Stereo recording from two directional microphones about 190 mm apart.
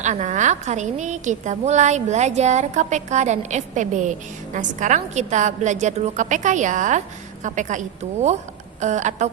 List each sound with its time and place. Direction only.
0.0 s a woman's voice: 40° right (ahead or behind)